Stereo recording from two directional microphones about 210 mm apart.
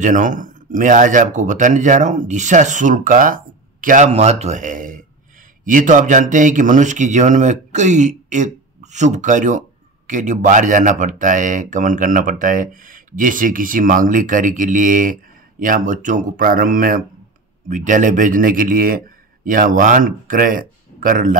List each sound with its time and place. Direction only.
0.0 s a man's voice: 35° right (ahead or behind)